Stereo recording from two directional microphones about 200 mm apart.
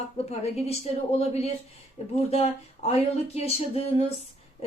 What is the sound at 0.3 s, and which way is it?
Speech, 30° left (ahead or behind).